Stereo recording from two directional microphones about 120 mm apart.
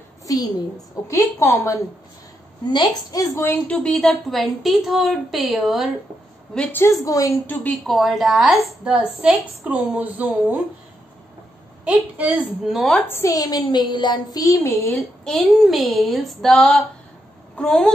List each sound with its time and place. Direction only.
0.3 s a woman's voice: 30° left (ahead or behind)
2.7 s a woman's voice: 35° left (ahead or behind)
3.7 s a woman's voice: 5° left (ahead or behind)
6.5 s a woman's voice: 10° left (ahead or behind)
6.8 s a woman's voice: 25° left (ahead or behind)
7.8 s a woman's voice: centre (ahead or behind)
11.8 s speech: 10° right (ahead or behind)
12.7 s a woman's voice: centre (ahead or behind)
13.0 s a woman's voice: 25° left (ahead or behind)
15.2 s a woman's voice: centre (ahead or behind)